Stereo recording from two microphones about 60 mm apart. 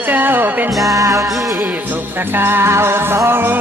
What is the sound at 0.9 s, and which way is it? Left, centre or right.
Music, right.